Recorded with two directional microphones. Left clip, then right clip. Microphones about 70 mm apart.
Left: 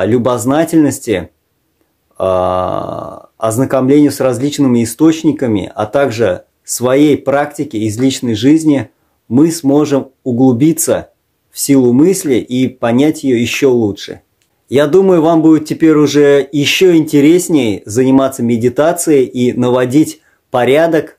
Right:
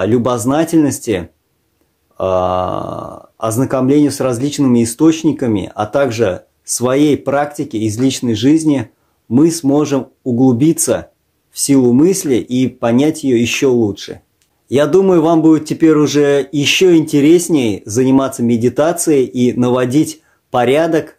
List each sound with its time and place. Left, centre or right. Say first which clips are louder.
0.0 s speech: left 2 dB; left